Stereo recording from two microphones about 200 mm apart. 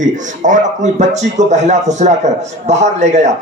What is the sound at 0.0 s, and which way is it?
Speech, 40° right (ahead or behind).